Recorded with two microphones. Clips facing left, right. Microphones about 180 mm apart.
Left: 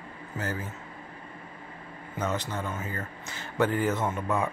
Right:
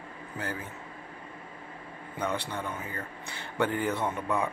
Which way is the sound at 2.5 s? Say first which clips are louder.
Left 2 dB; 15° right (ahead or behind).